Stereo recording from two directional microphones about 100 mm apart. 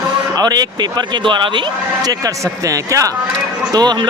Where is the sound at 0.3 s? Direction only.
40° right (ahead or behind).